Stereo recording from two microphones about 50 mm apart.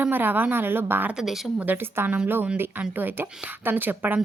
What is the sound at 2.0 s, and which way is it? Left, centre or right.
A woman's voice, right.